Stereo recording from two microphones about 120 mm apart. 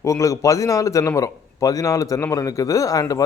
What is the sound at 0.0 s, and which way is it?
A man's voice, 25° left (ahead or behind).